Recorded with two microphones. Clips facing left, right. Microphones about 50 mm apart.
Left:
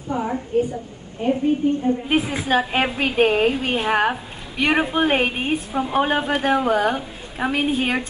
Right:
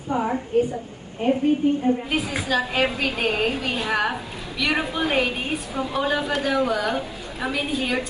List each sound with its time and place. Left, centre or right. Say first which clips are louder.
0.1 s a woman's voice: right 1 dB; centre
2.0 s a woman's voice: left 4 dB; left